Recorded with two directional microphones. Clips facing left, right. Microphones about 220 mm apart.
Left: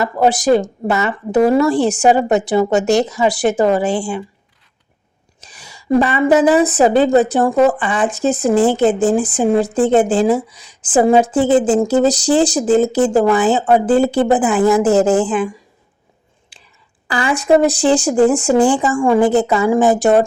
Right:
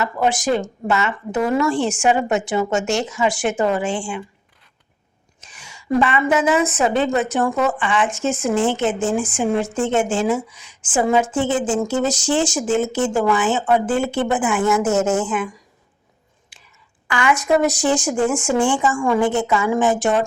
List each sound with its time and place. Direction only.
0.0 s a woman's voice: 35° left (ahead or behind)
5.4 s a woman's voice: 35° left (ahead or behind)
17.1 s a woman's voice: 35° left (ahead or behind)